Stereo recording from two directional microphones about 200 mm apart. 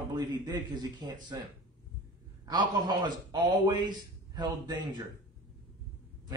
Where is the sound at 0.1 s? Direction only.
20° right (ahead or behind).